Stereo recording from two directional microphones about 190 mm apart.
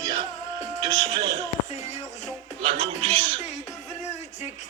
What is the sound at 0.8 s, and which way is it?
Speech, 20° right (ahead or behind).